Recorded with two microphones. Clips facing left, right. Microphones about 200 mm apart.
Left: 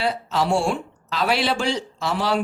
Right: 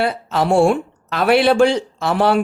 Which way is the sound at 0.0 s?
55° right (ahead or behind).